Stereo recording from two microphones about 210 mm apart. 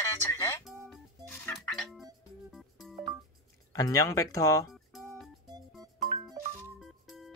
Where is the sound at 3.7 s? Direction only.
15° left (ahead or behind).